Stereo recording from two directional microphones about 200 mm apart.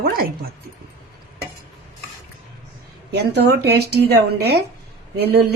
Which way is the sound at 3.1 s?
55° right (ahead or behind).